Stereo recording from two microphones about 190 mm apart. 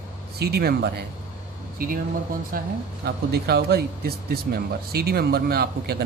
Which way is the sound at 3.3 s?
60° right (ahead or behind).